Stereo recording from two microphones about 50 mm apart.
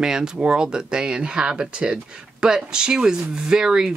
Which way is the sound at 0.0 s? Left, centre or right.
Centre.